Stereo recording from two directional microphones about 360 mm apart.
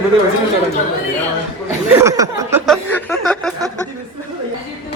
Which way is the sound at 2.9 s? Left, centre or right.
Centre.